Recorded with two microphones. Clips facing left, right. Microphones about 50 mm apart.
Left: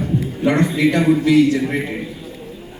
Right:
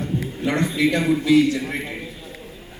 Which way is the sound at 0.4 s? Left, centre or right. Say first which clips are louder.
Left 4 dB; left.